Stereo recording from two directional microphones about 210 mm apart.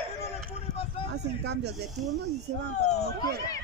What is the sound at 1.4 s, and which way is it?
Speech, 55° right (ahead or behind).